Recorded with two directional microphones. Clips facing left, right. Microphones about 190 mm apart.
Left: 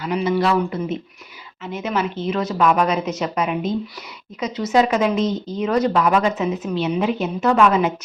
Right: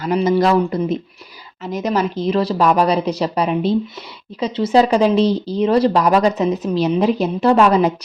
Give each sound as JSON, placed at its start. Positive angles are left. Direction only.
{"t": 0.0, "sound": "speech", "side_deg": -40}